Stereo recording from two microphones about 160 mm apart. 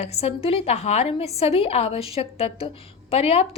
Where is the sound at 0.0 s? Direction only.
40° left (ahead or behind).